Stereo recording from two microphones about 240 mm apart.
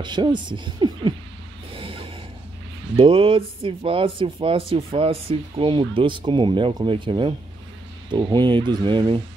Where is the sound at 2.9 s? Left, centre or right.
Right.